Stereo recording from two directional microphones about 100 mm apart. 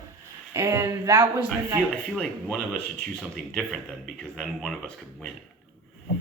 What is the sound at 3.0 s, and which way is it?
Speech, 5° left (ahead or behind).